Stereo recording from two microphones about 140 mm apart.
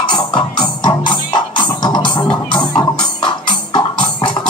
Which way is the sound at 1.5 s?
35° left (ahead or behind).